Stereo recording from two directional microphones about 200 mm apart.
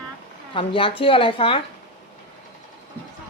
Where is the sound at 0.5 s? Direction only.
25° left (ahead or behind).